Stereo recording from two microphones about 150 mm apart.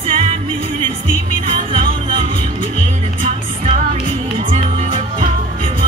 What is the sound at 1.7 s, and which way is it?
Music, 35° right (ahead or behind).